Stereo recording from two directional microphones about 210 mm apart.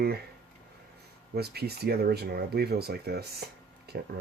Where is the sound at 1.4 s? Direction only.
50° right (ahead or behind).